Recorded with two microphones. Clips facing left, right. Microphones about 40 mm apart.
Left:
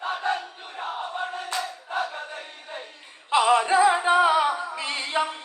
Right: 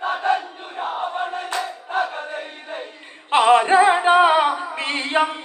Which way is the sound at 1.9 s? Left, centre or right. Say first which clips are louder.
Right 7 dB; right.